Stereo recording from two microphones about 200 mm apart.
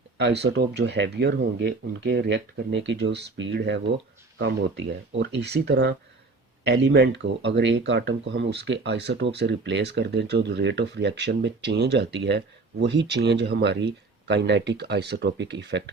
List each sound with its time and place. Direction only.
0.2 s speech: 60° right (ahead or behind)